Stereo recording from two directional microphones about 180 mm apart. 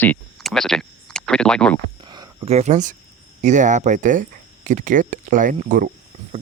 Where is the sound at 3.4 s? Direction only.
40° right (ahead or behind).